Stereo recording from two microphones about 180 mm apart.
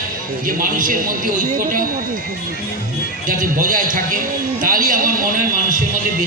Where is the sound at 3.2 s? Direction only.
50° right (ahead or behind).